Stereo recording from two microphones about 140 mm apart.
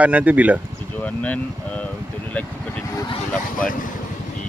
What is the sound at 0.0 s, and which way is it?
Speech, 10° right (ahead or behind).